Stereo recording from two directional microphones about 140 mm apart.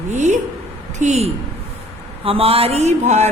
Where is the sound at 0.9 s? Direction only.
55° right (ahead or behind).